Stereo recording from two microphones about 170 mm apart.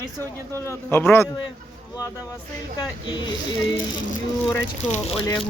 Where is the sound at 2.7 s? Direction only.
25° left (ahead or behind).